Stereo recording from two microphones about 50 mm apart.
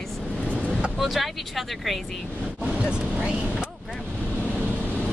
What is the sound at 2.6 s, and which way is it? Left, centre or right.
Vehicle, centre.